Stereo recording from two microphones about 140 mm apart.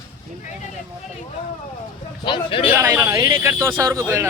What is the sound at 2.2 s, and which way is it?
Speech, 35° left (ahead or behind).